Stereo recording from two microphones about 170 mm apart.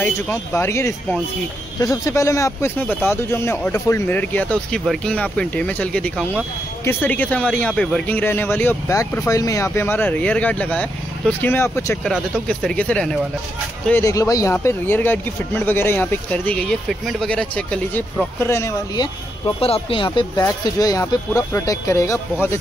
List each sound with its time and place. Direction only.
0.0 s speech: 15° left (ahead or behind)
12.0 s speech: 5° left (ahead or behind)
13.8 s speech: 15° left (ahead or behind); by 20.1 s 35° left (ahead or behind)
20.2 s speech: 20° left (ahead or behind)